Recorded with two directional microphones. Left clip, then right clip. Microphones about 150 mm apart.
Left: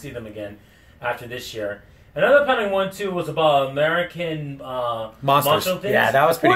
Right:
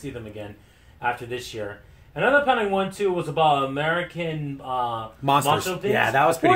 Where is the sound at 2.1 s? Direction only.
50° right (ahead or behind).